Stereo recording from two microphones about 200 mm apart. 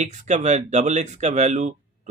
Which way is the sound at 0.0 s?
35° right (ahead or behind).